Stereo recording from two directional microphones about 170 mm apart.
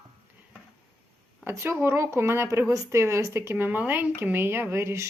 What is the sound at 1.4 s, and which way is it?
Speech, 15° right (ahead or behind).